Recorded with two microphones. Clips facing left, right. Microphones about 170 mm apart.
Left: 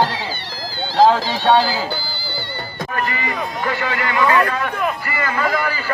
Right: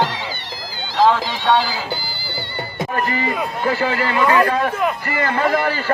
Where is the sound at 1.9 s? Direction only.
20° right (ahead or behind).